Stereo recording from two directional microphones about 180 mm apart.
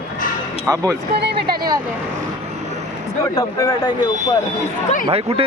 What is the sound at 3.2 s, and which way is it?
Speech, 20° left (ahead or behind).